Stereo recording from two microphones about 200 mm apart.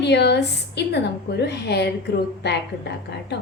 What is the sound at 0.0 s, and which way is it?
A woman's voice, 60° left (ahead or behind).